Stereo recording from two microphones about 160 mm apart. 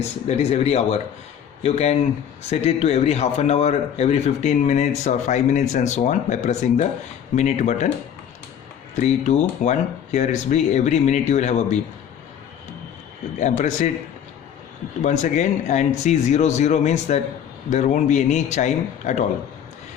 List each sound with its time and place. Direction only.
0.3 s a man's voice: 40° left (ahead or behind)
9.0 s a man's voice: 50° left (ahead or behind)
13.4 s a man's voice: 50° left (ahead or behind)
15.0 s a man's voice: 45° left (ahead or behind)